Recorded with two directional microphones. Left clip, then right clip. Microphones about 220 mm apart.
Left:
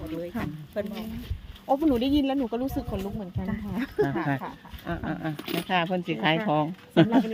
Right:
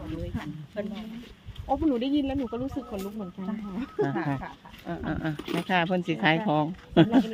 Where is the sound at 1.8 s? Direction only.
45° left (ahead or behind).